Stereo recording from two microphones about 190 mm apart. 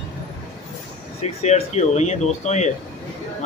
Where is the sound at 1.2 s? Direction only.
35° left (ahead or behind).